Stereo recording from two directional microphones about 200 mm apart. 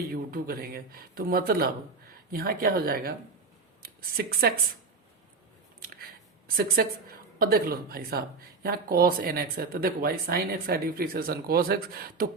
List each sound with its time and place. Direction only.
0.1 s speech: 45° right (ahead or behind)
6.8 s speech: 50° right (ahead or behind)